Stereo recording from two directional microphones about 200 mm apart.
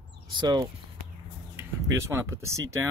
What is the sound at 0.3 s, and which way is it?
Speech, 25° right (ahead or behind).